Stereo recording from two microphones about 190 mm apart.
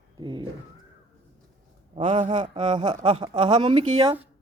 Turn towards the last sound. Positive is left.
turn(degrees=-25)  # may be behind; listen again after turning